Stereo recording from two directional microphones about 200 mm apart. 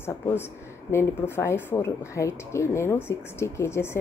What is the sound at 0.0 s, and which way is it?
Speech, 10° left (ahead or behind).